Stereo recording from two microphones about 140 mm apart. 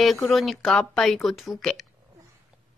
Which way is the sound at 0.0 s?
Centre (ahead or behind).